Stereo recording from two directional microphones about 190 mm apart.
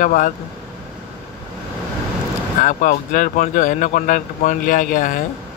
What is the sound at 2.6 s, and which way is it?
Speech, 45° left (ahead or behind).